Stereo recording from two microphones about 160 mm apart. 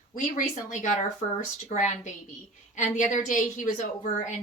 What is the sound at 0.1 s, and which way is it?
A woman's voice, 55° left (ahead or behind).